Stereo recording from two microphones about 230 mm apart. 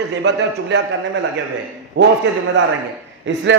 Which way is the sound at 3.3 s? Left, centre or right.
Right.